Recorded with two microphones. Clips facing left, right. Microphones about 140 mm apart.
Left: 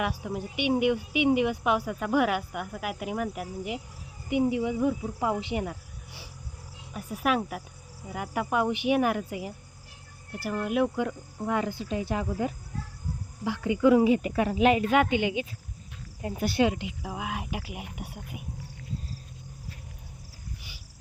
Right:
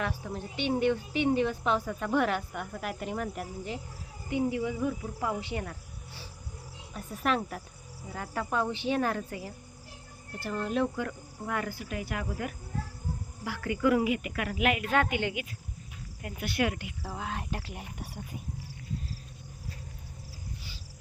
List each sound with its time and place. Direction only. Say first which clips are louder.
0.0 s speech: left 4 dB; 15° left (ahead or behind)
6.9 s speech: left 3 dB; 5° left (ahead or behind); by 14.8 s 30° left (ahead or behind)
14.8 s speech: left 4 dB; 15° left (ahead or behind)
16.2 s cricket: left 6 dB; 35° left (ahead or behind)
16.6 s speech: left 5 dB; 20° left (ahead or behind)
20.6 s a sound: right 2 dB; 15° left (ahead or behind)